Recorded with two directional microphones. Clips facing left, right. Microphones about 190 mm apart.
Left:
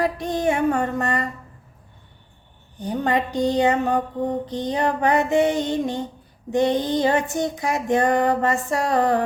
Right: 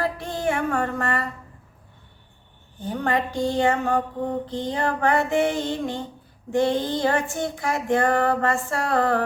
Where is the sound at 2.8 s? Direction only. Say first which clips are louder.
Left 2 dB; 20° left (ahead or behind).